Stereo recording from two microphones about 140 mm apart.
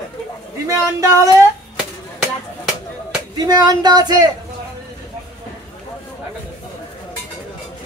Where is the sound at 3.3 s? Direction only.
30° right (ahead or behind).